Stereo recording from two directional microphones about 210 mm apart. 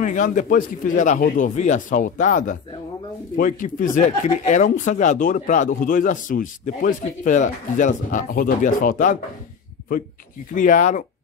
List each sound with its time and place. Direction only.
0.0 s speech: 35° left (ahead or behind)
10.5 s speech: 40° left (ahead or behind)